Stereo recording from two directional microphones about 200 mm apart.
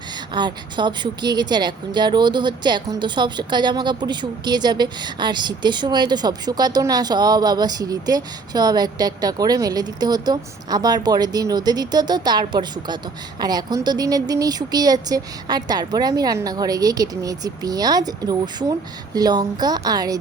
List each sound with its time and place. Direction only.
0.3 s a woman's voice: 20° right (ahead or behind)